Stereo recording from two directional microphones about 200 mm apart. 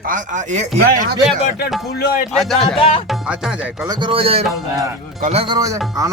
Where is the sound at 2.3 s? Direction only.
Centre (ahead or behind).